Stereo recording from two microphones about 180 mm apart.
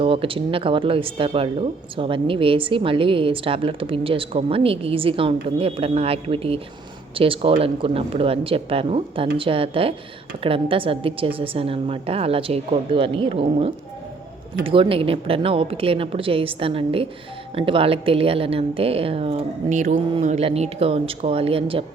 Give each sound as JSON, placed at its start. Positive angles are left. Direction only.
{"t": 0.0, "sound": "speech", "side_deg": -30}